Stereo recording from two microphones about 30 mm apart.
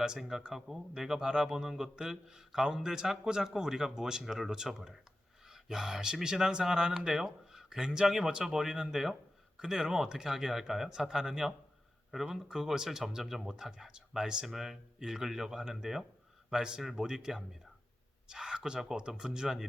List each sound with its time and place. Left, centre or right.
0.5 s a man's voice: centre
7.3 s a sound: centre
7.8 s speech: right
8.0 s a man's voice: centre
13.2 s speech: centre
13.5 s speech: right
14.4 s a man's voice: centre
16.5 s speech: right